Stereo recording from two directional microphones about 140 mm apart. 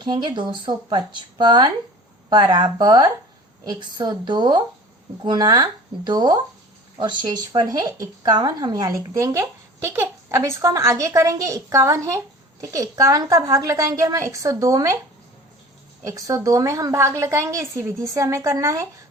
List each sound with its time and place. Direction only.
0.0 s speech: 35° right (ahead or behind)
16.0 s speech: 25° right (ahead or behind)